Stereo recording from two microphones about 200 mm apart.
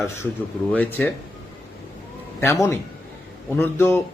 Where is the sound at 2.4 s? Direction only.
15° left (ahead or behind).